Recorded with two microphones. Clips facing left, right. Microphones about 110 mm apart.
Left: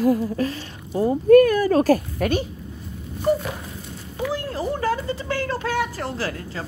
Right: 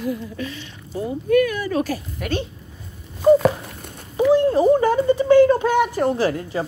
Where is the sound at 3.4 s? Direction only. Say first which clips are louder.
Right 11 dB; 55° right (ahead or behind).